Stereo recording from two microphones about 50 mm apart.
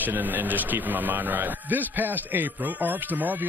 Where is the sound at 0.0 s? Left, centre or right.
Right.